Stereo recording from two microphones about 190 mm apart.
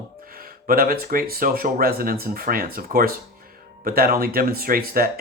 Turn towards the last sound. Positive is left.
turn(degrees=-50)  # may be behind; listen again after turning